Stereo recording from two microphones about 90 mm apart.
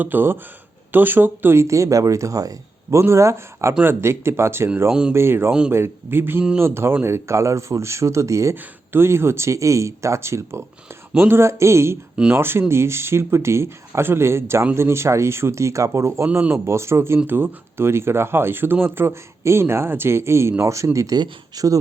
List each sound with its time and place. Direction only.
0.0 s speech: 20° right (ahead or behind)
4.9 s speech: 10° right (ahead or behind)
5.1 s speech: 25° right (ahead or behind); by 21.8 s 45° right (ahead or behind)